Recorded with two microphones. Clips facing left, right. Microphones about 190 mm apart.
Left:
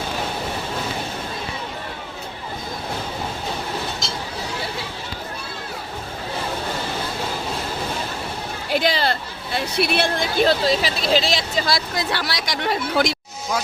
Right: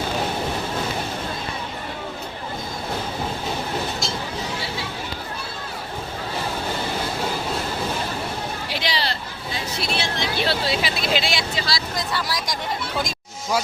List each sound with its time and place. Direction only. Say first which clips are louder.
8.7 s speech: left 8 dB; 50° left (ahead or behind); by 13.1 s 75° left (ahead or behind)